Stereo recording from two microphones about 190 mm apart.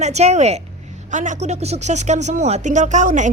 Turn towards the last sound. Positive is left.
turn(degrees=-40)  # may be behind; listen again after turning